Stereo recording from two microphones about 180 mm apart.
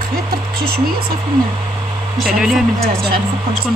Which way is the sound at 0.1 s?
55° right (ahead or behind).